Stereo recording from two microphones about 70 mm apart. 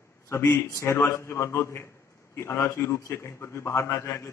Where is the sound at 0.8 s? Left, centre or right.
Left.